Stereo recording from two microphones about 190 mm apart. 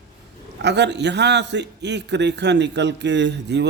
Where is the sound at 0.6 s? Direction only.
65° right (ahead or behind).